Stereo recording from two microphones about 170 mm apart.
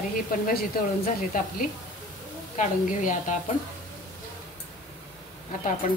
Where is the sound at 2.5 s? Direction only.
45° left (ahead or behind).